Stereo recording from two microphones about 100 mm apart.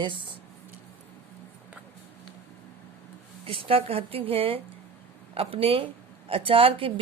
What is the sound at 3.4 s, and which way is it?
A woman's voice, 65° right (ahead or behind).